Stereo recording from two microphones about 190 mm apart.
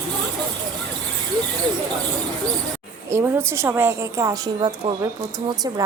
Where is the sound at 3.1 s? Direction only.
15° right (ahead or behind).